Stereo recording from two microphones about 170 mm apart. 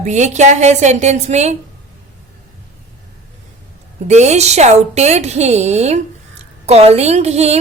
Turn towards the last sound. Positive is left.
turn(degrees=-40)  # may be behind; listen again after turning